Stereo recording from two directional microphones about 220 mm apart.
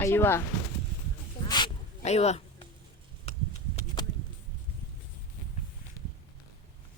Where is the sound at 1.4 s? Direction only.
20° left (ahead or behind).